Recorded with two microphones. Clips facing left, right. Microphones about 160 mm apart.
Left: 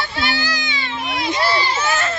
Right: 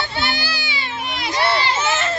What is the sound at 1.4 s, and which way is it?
Speech, 65° right (ahead or behind).